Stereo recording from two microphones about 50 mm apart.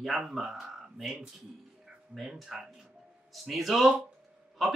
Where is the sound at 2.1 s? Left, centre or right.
Centre.